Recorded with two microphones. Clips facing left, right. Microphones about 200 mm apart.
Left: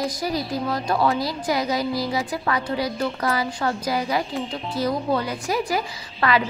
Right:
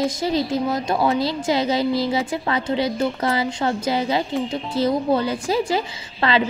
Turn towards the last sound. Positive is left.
turn(degrees=-25)  # may be behind; listen again after turning